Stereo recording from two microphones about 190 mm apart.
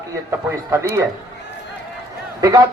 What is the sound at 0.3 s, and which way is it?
Speech, 15° right (ahead or behind).